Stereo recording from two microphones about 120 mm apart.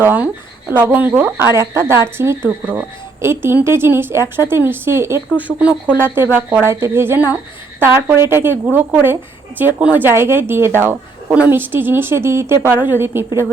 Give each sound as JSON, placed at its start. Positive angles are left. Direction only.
{"t": 0.0, "sound": "a woman's voice", "side_deg": -15}